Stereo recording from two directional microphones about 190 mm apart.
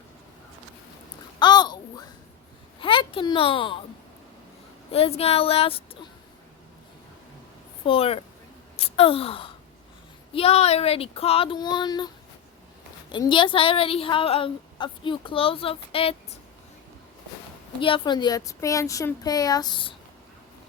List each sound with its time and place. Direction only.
1.4 s babbling: 20° left (ahead or behind)
2.8 s speech: 25° left (ahead or behind)
4.9 s speech: 30° left (ahead or behind)
7.9 s speech: 30° left (ahead or behind)
17.7 s speech: 25° left (ahead or behind)